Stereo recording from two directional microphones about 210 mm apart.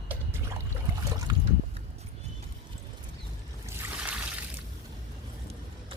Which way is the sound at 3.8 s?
5° right (ahead or behind).